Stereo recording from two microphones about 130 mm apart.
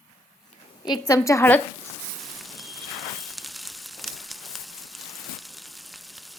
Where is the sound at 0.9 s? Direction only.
25° left (ahead or behind).